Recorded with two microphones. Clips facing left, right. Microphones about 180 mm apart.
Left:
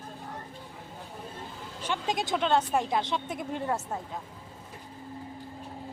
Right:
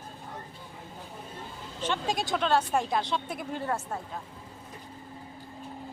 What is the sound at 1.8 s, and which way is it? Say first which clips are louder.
Speech: right 1 dB; 15° left (ahead or behind).